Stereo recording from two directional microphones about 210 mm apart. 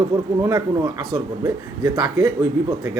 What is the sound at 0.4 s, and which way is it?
A man's voice, 20° right (ahead or behind).